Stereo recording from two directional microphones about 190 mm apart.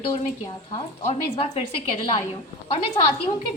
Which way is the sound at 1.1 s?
30° left (ahead or behind).